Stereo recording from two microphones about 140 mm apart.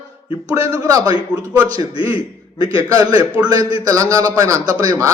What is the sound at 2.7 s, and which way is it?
Speech, 25° right (ahead or behind).